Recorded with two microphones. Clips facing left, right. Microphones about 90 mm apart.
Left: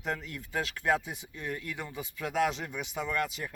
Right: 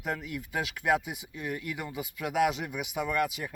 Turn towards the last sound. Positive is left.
turn(degrees=-5)  # may be behind; listen again after turning